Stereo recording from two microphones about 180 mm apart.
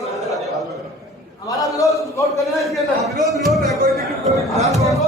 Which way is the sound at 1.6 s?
20° left (ahead or behind).